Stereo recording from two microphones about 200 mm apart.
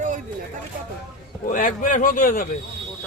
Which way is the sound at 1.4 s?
40° left (ahead or behind).